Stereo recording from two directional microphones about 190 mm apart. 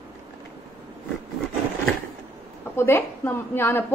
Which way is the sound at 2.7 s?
10° left (ahead or behind).